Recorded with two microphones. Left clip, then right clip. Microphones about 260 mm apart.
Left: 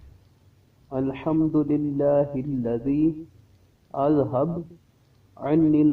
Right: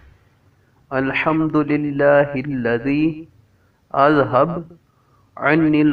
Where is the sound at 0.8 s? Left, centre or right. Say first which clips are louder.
Right 8 dB; right.